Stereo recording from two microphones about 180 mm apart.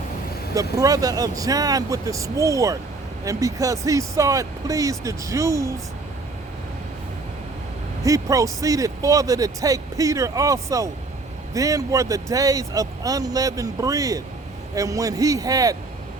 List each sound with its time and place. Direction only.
0.5 s speech: 20° right (ahead or behind)
8.0 s speech: 20° right (ahead or behind)